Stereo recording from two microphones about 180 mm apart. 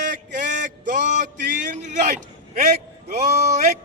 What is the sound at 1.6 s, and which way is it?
Speech, 45° right (ahead or behind).